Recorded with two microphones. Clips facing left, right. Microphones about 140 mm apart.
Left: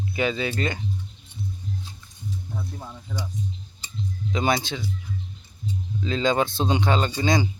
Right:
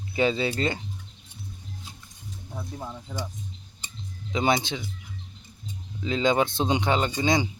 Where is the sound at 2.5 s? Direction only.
10° right (ahead or behind).